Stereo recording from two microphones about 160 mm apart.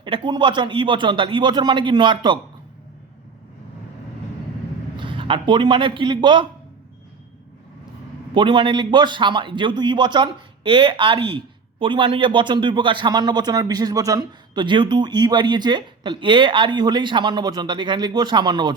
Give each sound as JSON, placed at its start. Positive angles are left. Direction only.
{"t": 0.0, "sound": "a man's voice", "side_deg": -30}
{"t": 4.9, "sound": "a man's voice", "side_deg": -30}
{"t": 8.3, "sound": "a man's voice", "side_deg": -30}